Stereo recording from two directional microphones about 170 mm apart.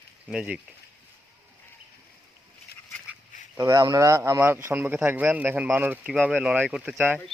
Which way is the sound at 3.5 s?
20° right (ahead or behind).